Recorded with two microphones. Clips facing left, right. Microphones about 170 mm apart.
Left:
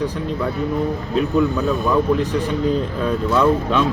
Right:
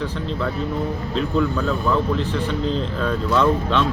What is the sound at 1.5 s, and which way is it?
Speech, 15° left (ahead or behind).